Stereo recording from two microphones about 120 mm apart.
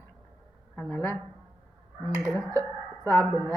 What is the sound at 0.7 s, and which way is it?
Speech, 15° left (ahead or behind).